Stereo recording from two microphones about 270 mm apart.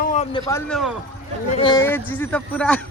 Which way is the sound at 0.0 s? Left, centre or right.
Left.